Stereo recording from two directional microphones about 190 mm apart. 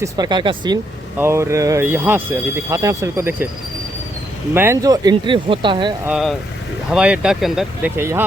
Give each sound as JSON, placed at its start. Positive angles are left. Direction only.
{"t": 0.0, "sound": "speech", "side_deg": -20}
{"t": 4.5, "sound": "speech", "side_deg": -15}
{"t": 6.1, "sound": "speech", "side_deg": 0}